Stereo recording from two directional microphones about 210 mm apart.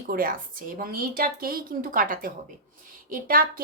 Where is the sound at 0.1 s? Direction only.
40° right (ahead or behind).